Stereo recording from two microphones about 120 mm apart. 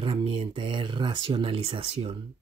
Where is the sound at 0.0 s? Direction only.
50° right (ahead or behind).